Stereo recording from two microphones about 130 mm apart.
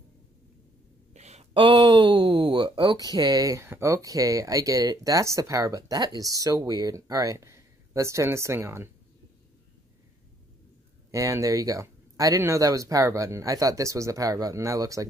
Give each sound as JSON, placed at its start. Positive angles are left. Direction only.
{"t": 1.1, "sound": "a sound", "side_deg": -60}
{"t": 1.5, "sound": "speech", "side_deg": -40}
{"t": 11.1, "sound": "speech", "side_deg": -25}